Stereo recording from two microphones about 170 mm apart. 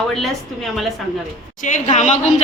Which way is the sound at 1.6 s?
45° left (ahead or behind).